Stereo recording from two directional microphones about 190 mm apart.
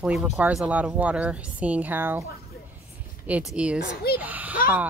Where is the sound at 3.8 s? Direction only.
55° left (ahead or behind).